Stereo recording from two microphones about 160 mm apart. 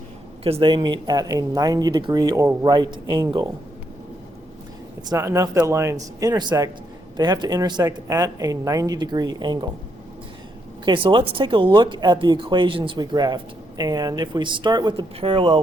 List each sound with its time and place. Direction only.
0.4 s speech: 35° right (ahead or behind); by 2.6 s 15° right (ahead or behind)
2.6 s speech: 25° right (ahead or behind)
5.0 s speech: 20° right (ahead or behind)
10.8 s speech: 30° right (ahead or behind)